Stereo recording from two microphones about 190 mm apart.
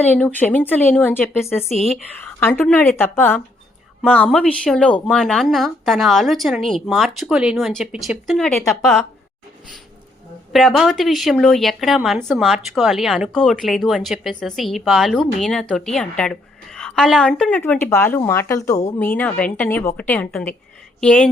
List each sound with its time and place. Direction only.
0.0 s speech: 10° left (ahead or behind)
10.5 s speech: centre (ahead or behind)